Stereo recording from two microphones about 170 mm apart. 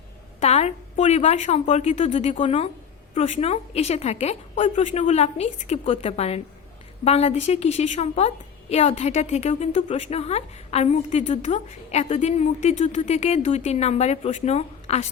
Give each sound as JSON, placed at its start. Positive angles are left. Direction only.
{"t": 0.3, "sound": "a woman's voice", "side_deg": 40}